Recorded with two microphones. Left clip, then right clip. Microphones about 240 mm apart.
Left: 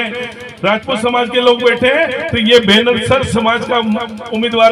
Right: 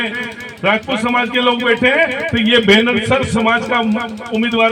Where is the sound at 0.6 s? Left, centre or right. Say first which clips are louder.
Left 2 dB; left.